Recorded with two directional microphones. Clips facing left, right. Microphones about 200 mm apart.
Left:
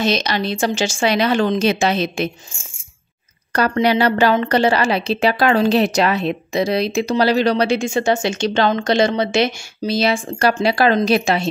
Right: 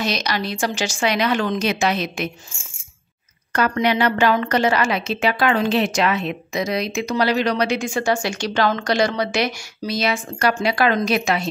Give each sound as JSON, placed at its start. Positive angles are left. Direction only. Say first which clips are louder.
{"t": 0.0, "sound": "a woman's voice", "louder": "left 4 dB", "side_deg": 25}
{"t": 3.5, "sound": "a woman's voice", "louder": "left 3 dB", "side_deg": 35}